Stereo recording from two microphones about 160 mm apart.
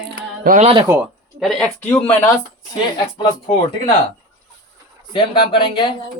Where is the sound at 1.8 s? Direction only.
10° left (ahead or behind).